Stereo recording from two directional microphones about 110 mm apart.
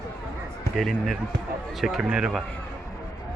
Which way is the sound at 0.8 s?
Centre (ahead or behind).